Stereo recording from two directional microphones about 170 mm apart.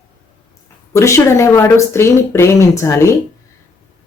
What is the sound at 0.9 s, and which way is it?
Speech, 15° left (ahead or behind).